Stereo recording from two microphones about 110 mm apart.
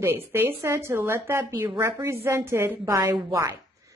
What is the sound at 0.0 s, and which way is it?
A woman's voice, 20° right (ahead or behind).